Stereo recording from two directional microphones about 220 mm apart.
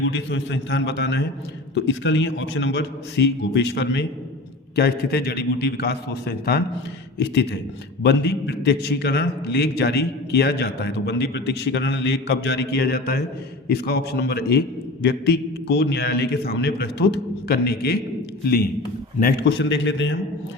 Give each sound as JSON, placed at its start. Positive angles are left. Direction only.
{"t": 0.1, "sound": "a man's voice", "side_deg": 55}
{"t": 8.0, "sound": "a man's voice", "side_deg": 50}
{"t": 19.2, "sound": "a man's voice", "side_deg": 50}